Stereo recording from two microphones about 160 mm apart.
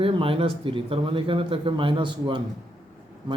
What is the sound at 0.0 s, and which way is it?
Speech, 35° right (ahead or behind).